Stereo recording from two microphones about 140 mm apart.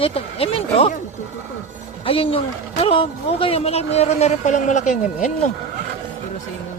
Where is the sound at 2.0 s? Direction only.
40° left (ahead or behind); by 4.9 s 60° left (ahead or behind).